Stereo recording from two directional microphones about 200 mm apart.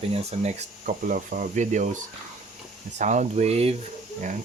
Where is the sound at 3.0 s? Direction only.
35° right (ahead or behind).